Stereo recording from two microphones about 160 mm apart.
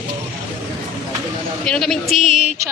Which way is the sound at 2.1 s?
50° left (ahead or behind).